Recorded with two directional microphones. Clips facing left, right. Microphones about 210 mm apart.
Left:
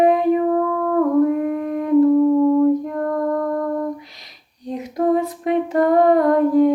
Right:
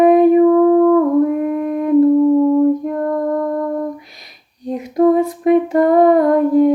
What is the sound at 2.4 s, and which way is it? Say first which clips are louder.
Music: right 2 dB; 25° right (ahead or behind).